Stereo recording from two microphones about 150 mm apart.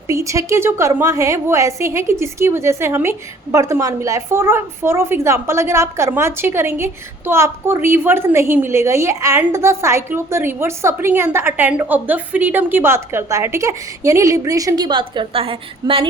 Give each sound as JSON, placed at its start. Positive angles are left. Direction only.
{"t": 0.1, "sound": "a woman's voice", "side_deg": -20}